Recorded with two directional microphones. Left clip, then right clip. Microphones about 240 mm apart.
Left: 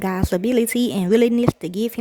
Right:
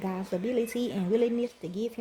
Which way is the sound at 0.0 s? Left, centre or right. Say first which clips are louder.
Left 10 dB; left.